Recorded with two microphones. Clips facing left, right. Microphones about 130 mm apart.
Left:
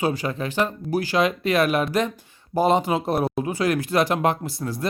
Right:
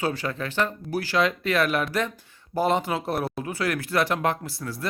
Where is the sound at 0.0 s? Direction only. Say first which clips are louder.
Left 3 dB; 15° left (ahead or behind).